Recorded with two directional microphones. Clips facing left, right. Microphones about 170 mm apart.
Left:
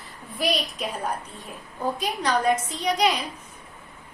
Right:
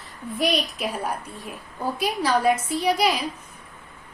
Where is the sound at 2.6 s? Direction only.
5° right (ahead or behind).